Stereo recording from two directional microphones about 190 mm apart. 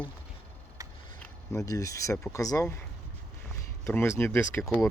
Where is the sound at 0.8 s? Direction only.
15° right (ahead or behind).